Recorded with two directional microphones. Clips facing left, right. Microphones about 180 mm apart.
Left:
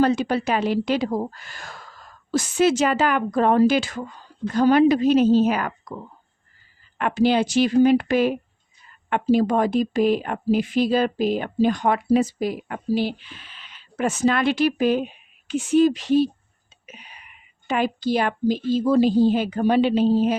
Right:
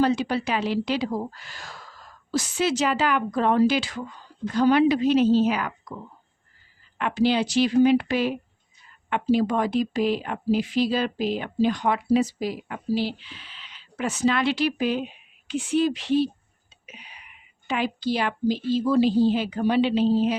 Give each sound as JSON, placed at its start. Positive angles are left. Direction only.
{"t": 0.0, "sound": "speech", "side_deg": 50}
{"t": 7.0, "sound": "speech", "side_deg": 50}
{"t": 16.8, "sound": "whispering", "side_deg": 45}
{"t": 17.7, "sound": "speech", "side_deg": 45}